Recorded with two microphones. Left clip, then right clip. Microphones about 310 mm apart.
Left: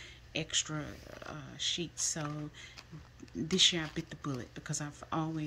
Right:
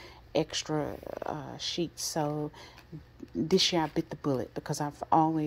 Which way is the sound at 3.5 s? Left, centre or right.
Centre.